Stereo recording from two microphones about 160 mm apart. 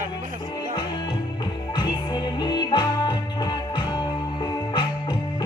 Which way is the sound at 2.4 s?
25° left (ahead or behind).